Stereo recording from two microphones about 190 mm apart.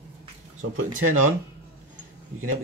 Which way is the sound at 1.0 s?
90° right.